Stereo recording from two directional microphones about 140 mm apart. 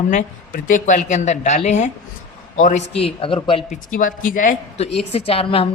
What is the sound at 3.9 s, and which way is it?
Speech, 75° left (ahead or behind).